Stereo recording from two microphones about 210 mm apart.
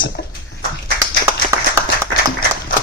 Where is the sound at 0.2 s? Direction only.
50° left (ahead or behind).